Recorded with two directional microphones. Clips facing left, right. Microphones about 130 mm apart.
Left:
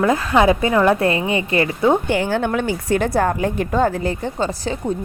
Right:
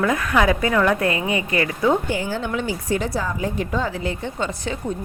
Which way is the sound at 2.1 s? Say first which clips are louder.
Left 5 dB; 70° left (ahead or behind).